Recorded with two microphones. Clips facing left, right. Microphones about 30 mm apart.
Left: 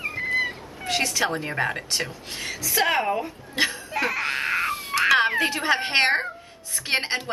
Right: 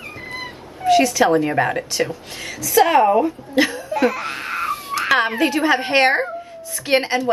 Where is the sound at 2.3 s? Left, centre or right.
Centre.